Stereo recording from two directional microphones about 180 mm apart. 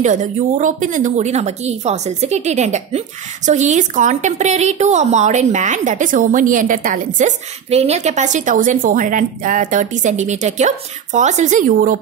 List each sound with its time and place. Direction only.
0.0 s a woman's voice: 45° right (ahead or behind)